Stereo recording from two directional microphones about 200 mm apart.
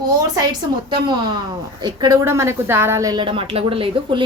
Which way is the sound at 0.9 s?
25° right (ahead or behind).